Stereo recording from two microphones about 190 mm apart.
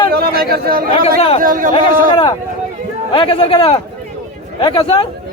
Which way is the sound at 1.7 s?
25° left (ahead or behind).